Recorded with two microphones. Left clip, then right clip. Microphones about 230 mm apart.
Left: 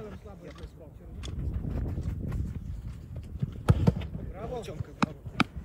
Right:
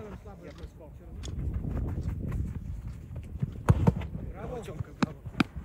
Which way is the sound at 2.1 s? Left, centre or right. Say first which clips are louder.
Even; right.